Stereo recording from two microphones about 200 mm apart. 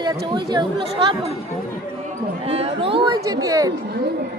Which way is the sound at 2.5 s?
30° right (ahead or behind).